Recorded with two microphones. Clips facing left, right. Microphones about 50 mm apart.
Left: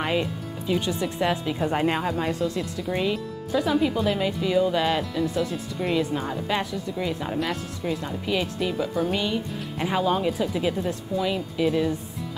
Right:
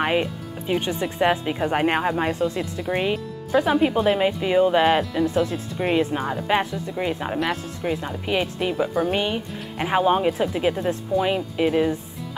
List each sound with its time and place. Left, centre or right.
0.0 s speech: right